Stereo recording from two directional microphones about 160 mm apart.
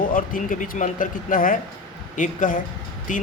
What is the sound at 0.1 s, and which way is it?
Speech, 55° left (ahead or behind).